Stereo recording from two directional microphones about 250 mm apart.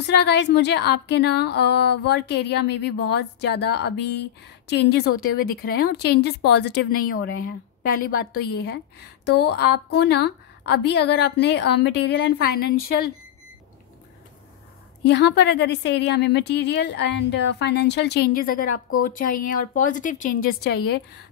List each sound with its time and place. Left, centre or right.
0.0 s a woman's voice: left
5.2 s a woman's voice: left
15.0 s a woman's voice: left